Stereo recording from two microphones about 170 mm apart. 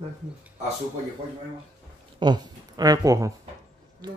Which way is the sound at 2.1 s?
25° right (ahead or behind).